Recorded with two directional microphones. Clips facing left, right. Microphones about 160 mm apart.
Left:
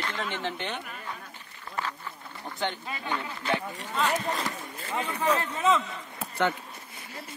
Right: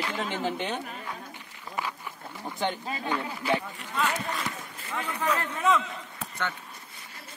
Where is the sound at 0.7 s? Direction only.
35° right (ahead or behind).